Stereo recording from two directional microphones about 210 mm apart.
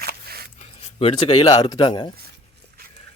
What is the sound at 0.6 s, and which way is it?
Speech, 30° left (ahead or behind).